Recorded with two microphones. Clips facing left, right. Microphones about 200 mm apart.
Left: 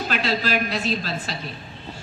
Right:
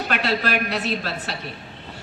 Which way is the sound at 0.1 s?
65° right (ahead or behind).